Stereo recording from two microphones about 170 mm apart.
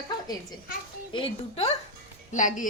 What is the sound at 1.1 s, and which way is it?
Speech, 35° left (ahead or behind).